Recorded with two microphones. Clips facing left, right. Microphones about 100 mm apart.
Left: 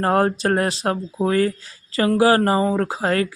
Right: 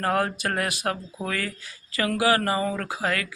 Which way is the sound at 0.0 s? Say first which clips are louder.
Left 6 dB; 35° left (ahead or behind).